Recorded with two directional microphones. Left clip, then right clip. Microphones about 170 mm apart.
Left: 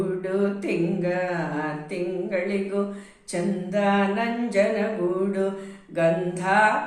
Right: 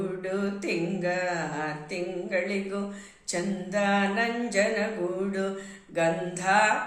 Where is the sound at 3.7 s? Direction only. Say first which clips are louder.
Left 3 dB; 20° right (ahead or behind).